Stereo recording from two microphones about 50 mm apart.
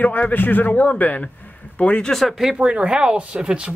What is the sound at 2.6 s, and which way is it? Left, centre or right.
Speech, right.